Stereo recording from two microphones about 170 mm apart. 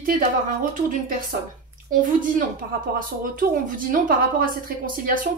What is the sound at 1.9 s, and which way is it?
Speech, 50° right (ahead or behind).